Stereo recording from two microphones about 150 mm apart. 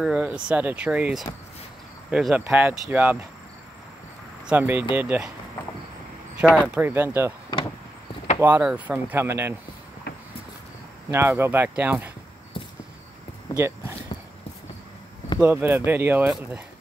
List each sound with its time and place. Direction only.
0.0 s speech: 5° right (ahead or behind)
4.5 s speech: 10° right (ahead or behind)
6.7 s speech: 15° right (ahead or behind)
8.4 s speech: 10° right (ahead or behind)
11.1 s speech: 15° right (ahead or behind)
13.6 s a sound: 15° right (ahead or behind)
15.3 s speech: 10° right (ahead or behind)